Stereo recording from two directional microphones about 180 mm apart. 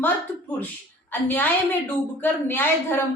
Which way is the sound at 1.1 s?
10° left (ahead or behind).